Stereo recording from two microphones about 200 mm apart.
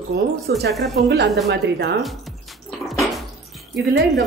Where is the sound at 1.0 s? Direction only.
60° right (ahead or behind).